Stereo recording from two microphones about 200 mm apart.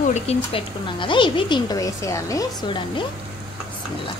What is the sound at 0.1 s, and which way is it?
Speech, 30° left (ahead or behind).